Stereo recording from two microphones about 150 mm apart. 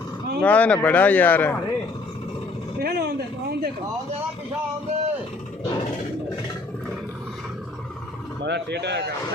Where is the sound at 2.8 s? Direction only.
90° right.